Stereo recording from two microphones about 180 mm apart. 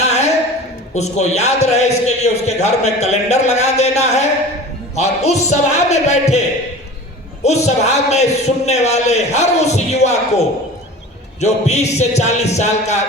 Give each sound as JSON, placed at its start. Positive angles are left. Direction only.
{"t": 0.0, "sound": "a sound", "side_deg": 35}
{"t": 0.9, "sound": "a man's voice", "side_deg": 40}
{"t": 7.4, "sound": "a man's voice", "side_deg": 40}